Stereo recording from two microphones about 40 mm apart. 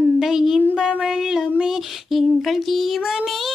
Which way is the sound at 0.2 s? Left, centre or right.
Centre.